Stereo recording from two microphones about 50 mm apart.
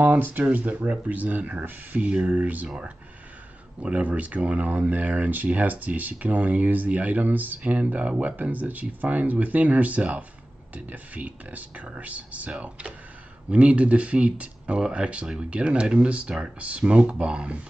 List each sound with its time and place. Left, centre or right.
0.0 s speech: right
3.8 s speech: right